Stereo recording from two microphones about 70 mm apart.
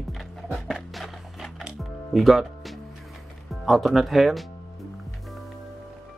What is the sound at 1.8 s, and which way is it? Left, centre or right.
Music, centre.